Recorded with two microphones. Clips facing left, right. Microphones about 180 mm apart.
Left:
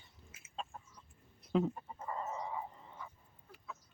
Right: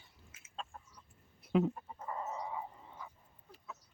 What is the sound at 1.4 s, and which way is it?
Chicken, 5° right (ahead or behind).